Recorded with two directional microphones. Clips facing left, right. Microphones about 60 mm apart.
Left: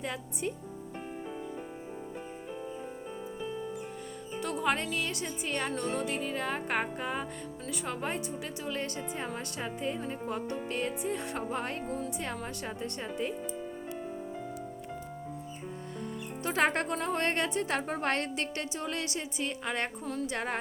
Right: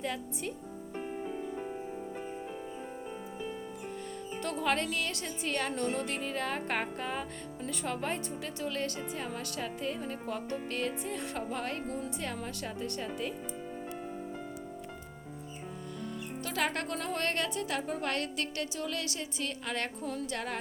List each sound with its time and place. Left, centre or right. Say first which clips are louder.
0.0 s speech: left 1 dB; centre
4.4 s speech: left 1 dB; centre
5.7 s a woman's voice: left 1 dB; centre; by 13.3 s left
16.4 s a woman's voice: left 5 dB; left
20.0 s speech: left 1 dB; centre
20.2 s a woman's voice: left 6 dB; left